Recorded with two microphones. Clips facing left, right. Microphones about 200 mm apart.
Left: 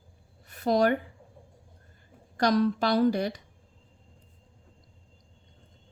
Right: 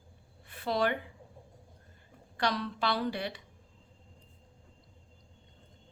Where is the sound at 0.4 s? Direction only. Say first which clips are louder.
Left 7 dB; 45° left (ahead or behind).